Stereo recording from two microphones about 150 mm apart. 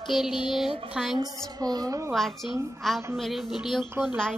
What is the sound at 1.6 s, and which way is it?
Speech, 25° right (ahead or behind).